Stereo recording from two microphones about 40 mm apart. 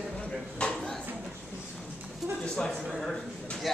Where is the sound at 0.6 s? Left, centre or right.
Left.